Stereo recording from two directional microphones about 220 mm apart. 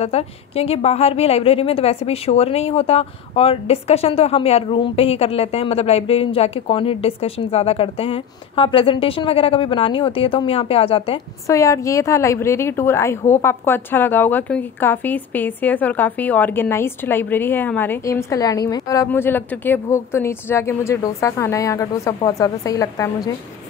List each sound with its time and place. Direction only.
0.0 s a woman's voice: 30° left (ahead or behind)
11.4 s a woman's voice: 15° left (ahead or behind)